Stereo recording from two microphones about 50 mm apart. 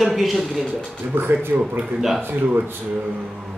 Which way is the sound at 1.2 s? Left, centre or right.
Right.